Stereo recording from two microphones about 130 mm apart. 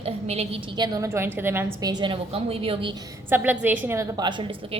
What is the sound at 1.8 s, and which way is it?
A woman's voice, 35° right (ahead or behind).